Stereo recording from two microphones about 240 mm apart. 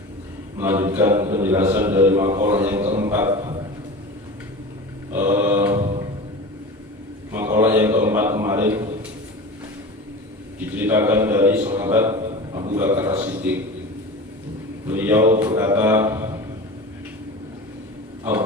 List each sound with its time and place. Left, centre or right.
0.6 s speech: centre
5.1 s mantra: centre
7.3 s a sound: centre
10.8 s a man's voice: centre
14.8 s speech: centre
18.3 s speech: centre